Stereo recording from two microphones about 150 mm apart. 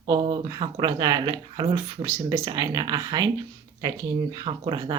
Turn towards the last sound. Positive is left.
turn(degrees=-30)  # may be behind; listen again after turning